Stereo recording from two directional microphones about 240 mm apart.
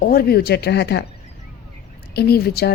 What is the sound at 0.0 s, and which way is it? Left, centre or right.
Speech, left.